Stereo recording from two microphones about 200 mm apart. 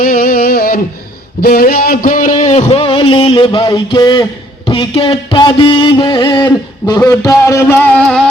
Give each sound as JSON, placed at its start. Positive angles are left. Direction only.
{"t": 0.0, "sound": "music", "side_deg": 45}
{"t": 1.4, "sound": "a man's voice", "side_deg": 50}
{"t": 7.0, "sound": "music", "side_deg": 15}